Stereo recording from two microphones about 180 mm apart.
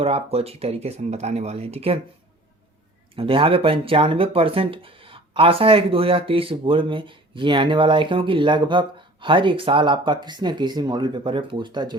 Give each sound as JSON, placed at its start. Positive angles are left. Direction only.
{"t": 0.0, "sound": "speech", "side_deg": -35}
{"t": 3.2, "sound": "speech", "side_deg": -30}